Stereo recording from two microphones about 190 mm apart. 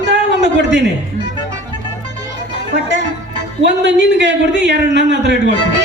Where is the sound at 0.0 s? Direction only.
65° right (ahead or behind).